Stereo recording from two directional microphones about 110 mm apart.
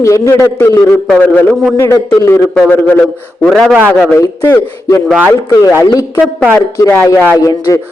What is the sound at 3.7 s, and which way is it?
Speech, 10° right (ahead or behind).